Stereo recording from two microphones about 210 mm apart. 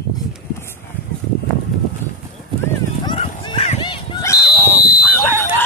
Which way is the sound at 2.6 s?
20° left (ahead or behind).